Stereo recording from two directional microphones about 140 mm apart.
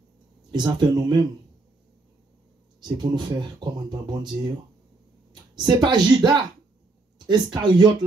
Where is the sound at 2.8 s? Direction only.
30° right (ahead or behind).